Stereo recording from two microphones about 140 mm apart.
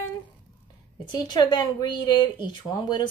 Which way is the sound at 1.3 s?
30° left (ahead or behind).